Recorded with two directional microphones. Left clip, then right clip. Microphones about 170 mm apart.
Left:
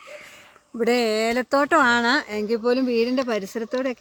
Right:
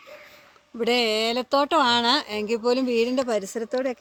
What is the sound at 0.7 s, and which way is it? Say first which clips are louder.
Speech: left 1 dB; 60° left (ahead or behind).